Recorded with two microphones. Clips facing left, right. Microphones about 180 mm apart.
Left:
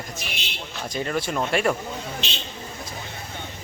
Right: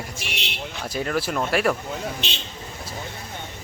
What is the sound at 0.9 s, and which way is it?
Speech, 5° right (ahead or behind).